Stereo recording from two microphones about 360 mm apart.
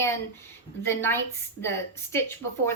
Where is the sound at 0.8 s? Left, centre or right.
Centre.